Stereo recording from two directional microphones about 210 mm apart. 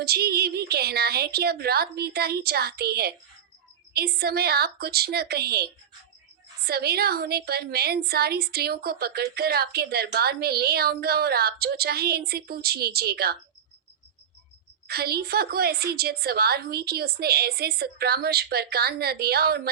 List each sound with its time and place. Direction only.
0.0 s a woman's voice: 50° right (ahead or behind)
14.8 s a woman's voice: 50° right (ahead or behind)